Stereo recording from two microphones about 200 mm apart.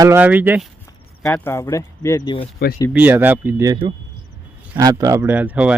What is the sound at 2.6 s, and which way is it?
Speech, 50° left (ahead or behind).